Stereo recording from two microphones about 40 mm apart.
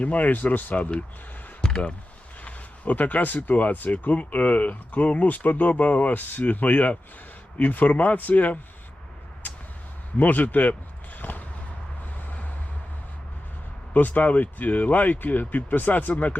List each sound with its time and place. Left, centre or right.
0.0 s speech: left
1.6 s a sound: left
2.4 s speech: left
10.2 s speech: left
11.2 s a sound: left
13.9 s speech: left